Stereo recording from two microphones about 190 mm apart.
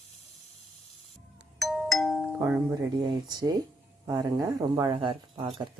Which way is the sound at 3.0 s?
20° right (ahead or behind).